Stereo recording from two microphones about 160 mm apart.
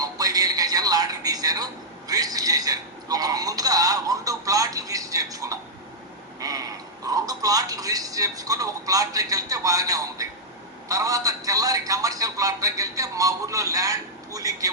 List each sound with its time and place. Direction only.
0.0 s music: 25° right (ahead or behind)
6.4 s a man's voice: 20° right (ahead or behind)